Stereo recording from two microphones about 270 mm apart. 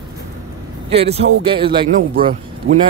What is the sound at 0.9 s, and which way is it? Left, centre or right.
Speech, right.